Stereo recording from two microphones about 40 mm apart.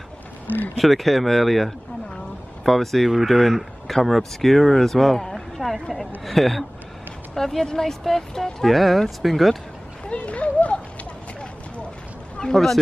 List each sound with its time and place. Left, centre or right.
0.7 s speech: centre
3.1 s speech: centre
10.0 s a sound: left
12.5 s speech: centre